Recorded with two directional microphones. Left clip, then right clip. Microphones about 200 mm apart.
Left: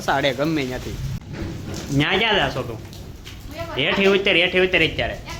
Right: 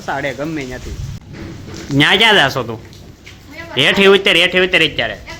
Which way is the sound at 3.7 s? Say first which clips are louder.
Right 8 dB; 40° right (ahead or behind).